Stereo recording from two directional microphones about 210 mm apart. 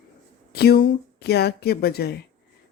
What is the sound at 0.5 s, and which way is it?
A woman's voice, 45° left (ahead or behind).